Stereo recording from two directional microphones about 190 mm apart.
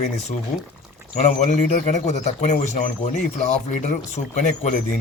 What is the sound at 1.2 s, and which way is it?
Speech, 40° left (ahead or behind).